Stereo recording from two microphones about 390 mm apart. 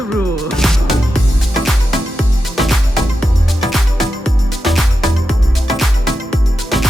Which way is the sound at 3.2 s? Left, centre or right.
Centre.